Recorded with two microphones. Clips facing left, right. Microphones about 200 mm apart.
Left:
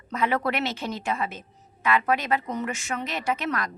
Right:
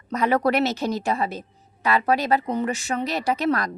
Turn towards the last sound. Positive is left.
turn(degrees=-35)  # may be behind; listen again after turning